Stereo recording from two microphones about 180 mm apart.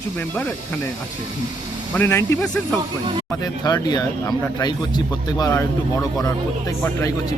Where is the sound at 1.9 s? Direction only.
15° left (ahead or behind).